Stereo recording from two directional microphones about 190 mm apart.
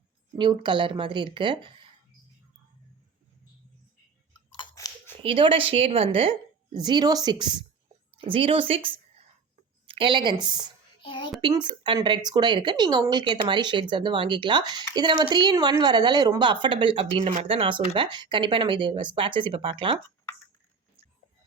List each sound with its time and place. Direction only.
0.3 s a woman's voice: 25° right (ahead or behind)
4.5 s chewing: 20° left (ahead or behind)
5.2 s a woman's voice: 30° right (ahead or behind)
11.0 s a child's voice: 25° left (ahead or behind)
11.3 s a woman's voice: 25° right (ahead or behind)